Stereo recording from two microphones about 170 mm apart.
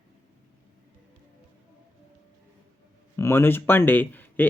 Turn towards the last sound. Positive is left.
turn(degrees=10)  # may be behind; listen again after turning